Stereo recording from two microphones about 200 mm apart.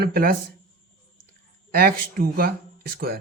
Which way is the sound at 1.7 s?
45° right (ahead or behind).